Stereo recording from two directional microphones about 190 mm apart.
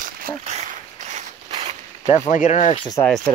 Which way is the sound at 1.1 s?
35° right (ahead or behind).